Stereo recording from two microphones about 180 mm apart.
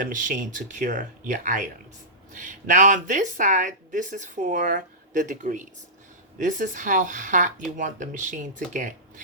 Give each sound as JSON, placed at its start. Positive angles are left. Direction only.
{"t": 0.0, "sound": "speech", "side_deg": -45}